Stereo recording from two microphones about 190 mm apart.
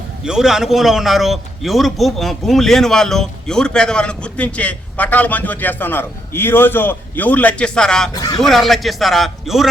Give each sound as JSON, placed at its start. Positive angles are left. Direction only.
{"t": 0.3, "sound": "a man's voice", "side_deg": -5}
{"t": 8.1, "sound": "a man's voice", "side_deg": 20}
{"t": 8.4, "sound": "a man's voice", "side_deg": 0}